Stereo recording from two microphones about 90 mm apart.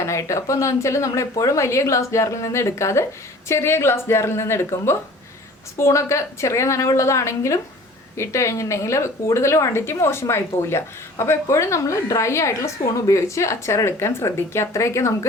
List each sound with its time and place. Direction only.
0.0 s a woman's voice: 35° left (ahead or behind)